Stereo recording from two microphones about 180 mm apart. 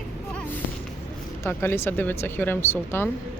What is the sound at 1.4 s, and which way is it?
Speech, 15° left (ahead or behind).